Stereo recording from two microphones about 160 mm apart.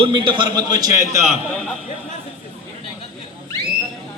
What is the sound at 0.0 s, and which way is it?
A man's voice, 30° right (ahead or behind).